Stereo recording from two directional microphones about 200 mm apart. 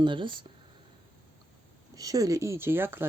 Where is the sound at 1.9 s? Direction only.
15° right (ahead or behind).